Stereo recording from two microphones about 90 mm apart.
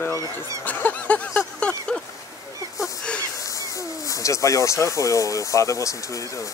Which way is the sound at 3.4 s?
40° left (ahead or behind).